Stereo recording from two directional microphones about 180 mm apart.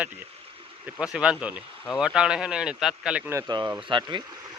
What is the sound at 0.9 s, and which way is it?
Speech, 5° right (ahead or behind).